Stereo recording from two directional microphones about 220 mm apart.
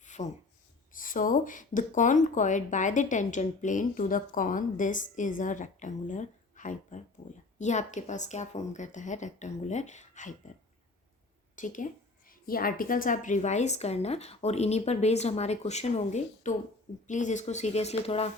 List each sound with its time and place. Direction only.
0.0 s a sound: 35° left (ahead or behind)
0.9 s speech: 40° left (ahead or behind)
11.5 s speech: 35° left (ahead or behind)